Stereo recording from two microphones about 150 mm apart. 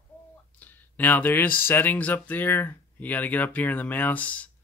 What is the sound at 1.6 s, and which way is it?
Speech, 15° left (ahead or behind).